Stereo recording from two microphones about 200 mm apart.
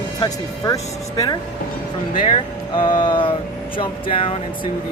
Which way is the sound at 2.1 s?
25° left (ahead or behind).